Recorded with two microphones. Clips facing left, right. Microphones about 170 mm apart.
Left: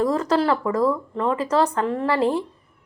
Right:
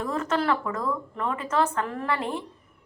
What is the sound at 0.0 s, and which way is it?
Speech, 35° left (ahead or behind).